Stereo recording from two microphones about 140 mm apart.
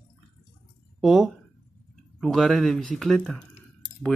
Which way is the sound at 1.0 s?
5° right (ahead or behind).